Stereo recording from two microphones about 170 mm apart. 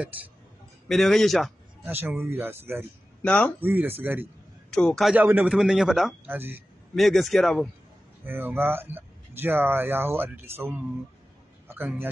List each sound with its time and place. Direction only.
0.8 s speech: centre (ahead or behind)
2.0 s speech: 15° right (ahead or behind)
3.2 s speech: 5° left (ahead or behind)
3.6 s speech: 10° right (ahead or behind)
4.6 s speech: 5° left (ahead or behind)
5.2 s speech: 10° right (ahead or behind)
6.2 s speech: 10° right (ahead or behind)
7.0 s speech: centre (ahead or behind)
8.3 s a man's voice: 10° right (ahead or behind)